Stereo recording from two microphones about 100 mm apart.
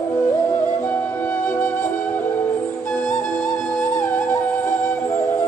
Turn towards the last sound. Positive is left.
turn(degrees=5)  # may be behind; listen again after turning